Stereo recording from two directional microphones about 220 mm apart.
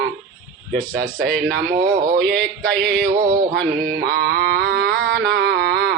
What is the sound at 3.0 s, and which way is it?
Music, 40° right (ahead or behind).